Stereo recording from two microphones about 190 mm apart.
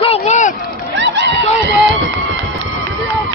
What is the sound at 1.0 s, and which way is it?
Run, 65° right (ahead or behind).